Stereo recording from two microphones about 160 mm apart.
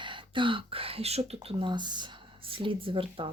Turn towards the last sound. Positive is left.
turn(degrees=-35)  # may be behind; listen again after turning